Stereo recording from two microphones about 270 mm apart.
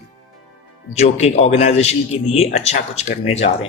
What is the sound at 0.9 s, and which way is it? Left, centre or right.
Speech, left.